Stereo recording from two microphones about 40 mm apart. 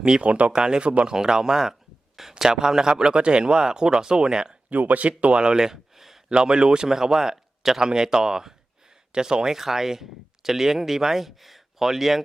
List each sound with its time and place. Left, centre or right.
0.2 s speech: right
0.5 s speech: centre
0.9 s speech: right
1.1 s speech: centre
4.7 s speech: right
5.0 s speech: right; by 6.2 s centre
6.2 s speech: right; by 12.2 s centre